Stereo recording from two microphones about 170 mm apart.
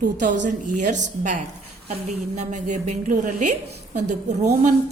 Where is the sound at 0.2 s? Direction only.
50° right (ahead or behind).